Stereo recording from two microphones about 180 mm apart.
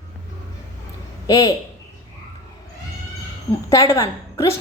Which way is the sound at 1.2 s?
20° left (ahead or behind).